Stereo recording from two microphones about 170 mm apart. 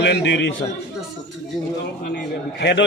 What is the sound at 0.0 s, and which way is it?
Speech, 90° left.